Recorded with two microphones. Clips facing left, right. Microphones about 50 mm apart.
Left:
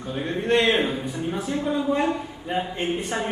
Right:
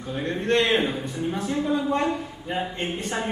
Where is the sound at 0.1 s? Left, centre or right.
Centre.